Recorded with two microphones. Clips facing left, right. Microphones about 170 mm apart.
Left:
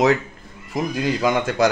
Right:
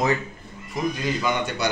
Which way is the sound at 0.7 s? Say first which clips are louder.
Left 3 dB; 90° left.